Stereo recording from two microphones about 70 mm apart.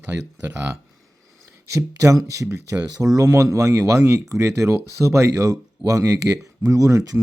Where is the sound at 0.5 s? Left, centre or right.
Right.